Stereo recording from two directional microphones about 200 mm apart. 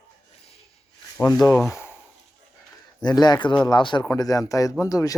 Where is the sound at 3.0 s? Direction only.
20° left (ahead or behind).